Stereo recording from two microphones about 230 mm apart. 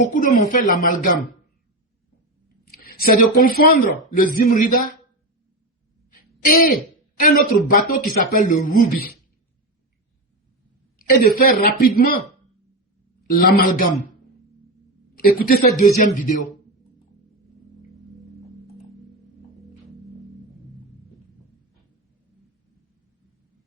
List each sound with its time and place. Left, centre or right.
0.0 s a man's voice: left
2.8 s a man's voice: left
6.4 s a man's voice: left
10.9 s a man's voice: left
13.2 s a man's voice: left
15.1 s a woman's voice: left